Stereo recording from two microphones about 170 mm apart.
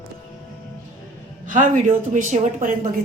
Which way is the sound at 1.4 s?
50° right (ahead or behind).